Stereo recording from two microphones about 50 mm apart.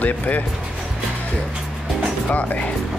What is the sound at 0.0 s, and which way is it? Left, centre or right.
Speech, left.